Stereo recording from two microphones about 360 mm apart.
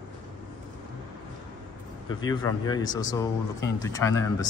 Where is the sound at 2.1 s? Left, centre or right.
Centre.